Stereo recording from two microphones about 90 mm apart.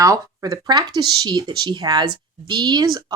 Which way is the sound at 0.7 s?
50° right (ahead or behind).